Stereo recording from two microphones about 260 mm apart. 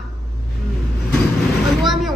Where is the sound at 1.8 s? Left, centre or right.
Centre.